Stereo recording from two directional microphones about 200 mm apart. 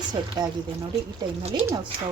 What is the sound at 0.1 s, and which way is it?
Speech, 20° right (ahead or behind).